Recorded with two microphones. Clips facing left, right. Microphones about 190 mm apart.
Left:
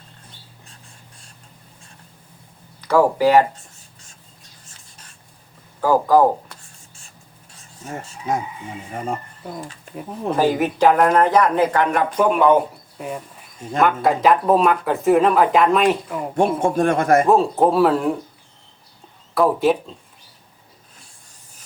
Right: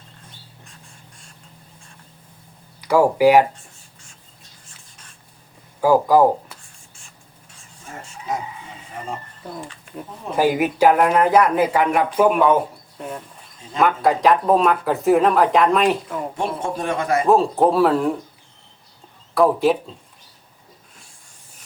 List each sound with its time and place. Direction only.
2.8 s speech: 10° right (ahead or behind)
5.8 s speech: 10° right (ahead or behind)
7.5 s a sound: 40° left (ahead or behind)
9.4 s speech: 5° left (ahead or behind)
10.3 s speech: 10° right (ahead or behind)
16.6 s a man's voice: 50° left (ahead or behind)
17.2 s speech: centre (ahead or behind)
19.3 s speech: centre (ahead or behind)